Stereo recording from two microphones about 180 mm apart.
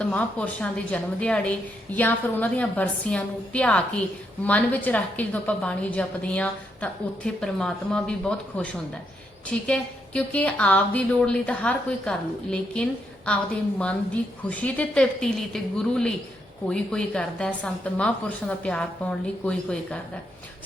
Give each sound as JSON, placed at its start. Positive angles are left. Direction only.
{"t": 0.0, "sound": "a woman's voice", "side_deg": 5}